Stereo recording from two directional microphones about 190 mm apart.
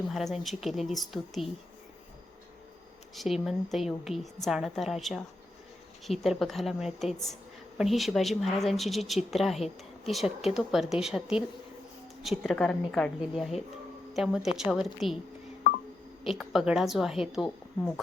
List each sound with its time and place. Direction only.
0.1 s a woman's voice: centre (ahead or behind)
3.2 s a woman's voice: centre (ahead or behind)
16.2 s a woman's voice: centre (ahead or behind)